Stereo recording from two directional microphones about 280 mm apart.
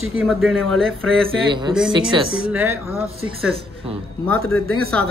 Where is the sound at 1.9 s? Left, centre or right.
Centre.